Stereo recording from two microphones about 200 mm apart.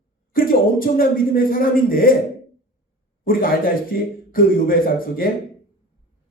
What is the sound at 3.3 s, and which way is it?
Speech, 45° left (ahead or behind).